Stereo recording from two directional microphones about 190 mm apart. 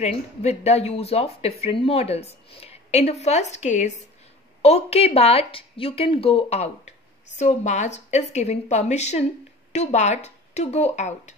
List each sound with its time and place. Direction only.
0.0 s speech: 35° left (ahead or behind)